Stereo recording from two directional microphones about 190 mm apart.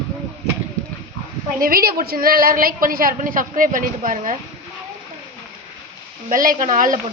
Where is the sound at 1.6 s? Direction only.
50° right (ahead or behind).